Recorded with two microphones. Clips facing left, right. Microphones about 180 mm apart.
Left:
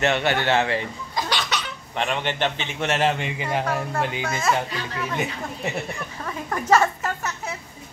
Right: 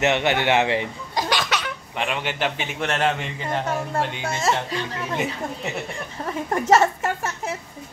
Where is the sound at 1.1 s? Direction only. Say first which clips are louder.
Right 3 dB; 50° right (ahead or behind).